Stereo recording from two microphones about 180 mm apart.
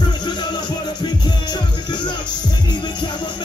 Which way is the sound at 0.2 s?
25° left (ahead or behind).